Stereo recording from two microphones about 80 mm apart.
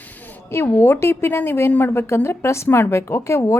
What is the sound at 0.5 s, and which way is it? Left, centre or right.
A woman's voice, left.